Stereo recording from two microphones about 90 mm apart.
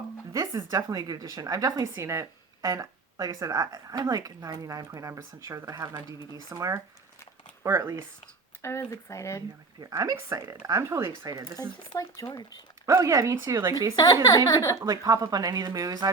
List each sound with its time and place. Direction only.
0.3 s speech: 45° right (ahead or behind)
2.6 s speech: 45° right (ahead or behind)
8.6 s speech: 30° left (ahead or behind)
9.8 s speech: 40° right (ahead or behind)
11.9 s a woman's voice: 40° left (ahead or behind)
12.8 s speech: 35° right (ahead or behind)
13.9 s a woman's voice: 45° left (ahead or behind)
14.8 s speech: 45° right (ahead or behind)